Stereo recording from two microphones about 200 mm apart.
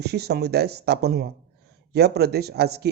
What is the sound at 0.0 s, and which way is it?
Speech, 55° right (ahead or behind).